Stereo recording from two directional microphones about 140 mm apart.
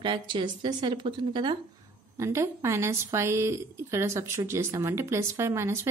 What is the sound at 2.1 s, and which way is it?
Speech, 20° right (ahead or behind).